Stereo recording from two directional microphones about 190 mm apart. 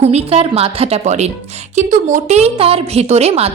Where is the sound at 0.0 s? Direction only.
35° right (ahead or behind).